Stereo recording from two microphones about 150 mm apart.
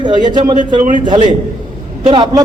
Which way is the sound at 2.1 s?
30° right (ahead or behind).